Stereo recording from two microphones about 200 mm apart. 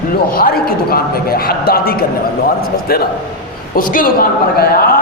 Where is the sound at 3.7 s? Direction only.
45° left (ahead or behind).